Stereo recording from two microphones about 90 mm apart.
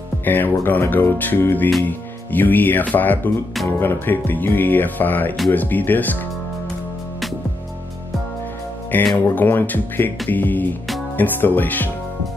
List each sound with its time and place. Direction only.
0.2 s speech: 20° left (ahead or behind)
8.9 s speech: 20° left (ahead or behind)